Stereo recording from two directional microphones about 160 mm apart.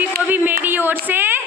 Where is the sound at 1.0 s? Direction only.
10° right (ahead or behind).